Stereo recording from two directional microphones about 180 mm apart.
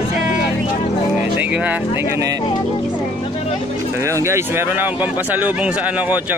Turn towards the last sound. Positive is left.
turn(degrees=-15)  # may be behind; listen again after turning